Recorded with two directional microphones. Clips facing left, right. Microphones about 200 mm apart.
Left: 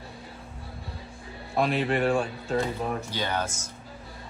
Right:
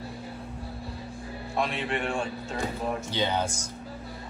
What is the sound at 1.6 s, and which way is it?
Speech, 35° left (ahead or behind).